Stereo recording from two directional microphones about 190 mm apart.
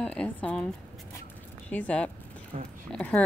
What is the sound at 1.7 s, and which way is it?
Speech, 5° left (ahead or behind).